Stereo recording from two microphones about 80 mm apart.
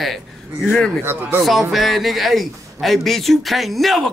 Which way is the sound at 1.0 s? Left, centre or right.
Right.